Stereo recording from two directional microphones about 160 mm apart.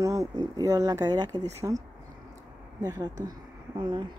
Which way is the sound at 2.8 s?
25° right (ahead or behind).